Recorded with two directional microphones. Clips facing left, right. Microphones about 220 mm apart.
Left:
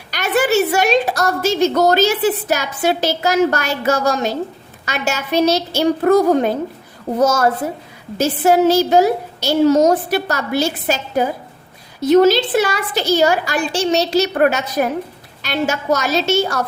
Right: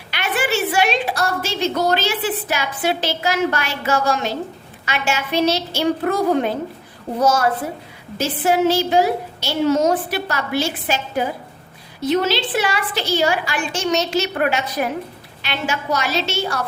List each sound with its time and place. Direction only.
0.1 s a woman's voice: 40° left (ahead or behind)